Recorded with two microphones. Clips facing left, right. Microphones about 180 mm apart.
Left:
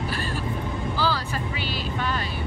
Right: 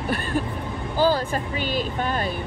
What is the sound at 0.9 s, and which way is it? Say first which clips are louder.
Speech: right 8 dB; 50° right (ahead or behind).